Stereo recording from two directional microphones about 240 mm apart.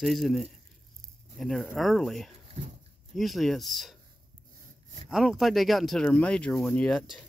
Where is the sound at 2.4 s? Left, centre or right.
Right.